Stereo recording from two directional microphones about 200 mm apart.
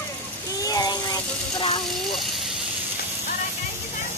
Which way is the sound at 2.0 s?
Centre (ahead or behind).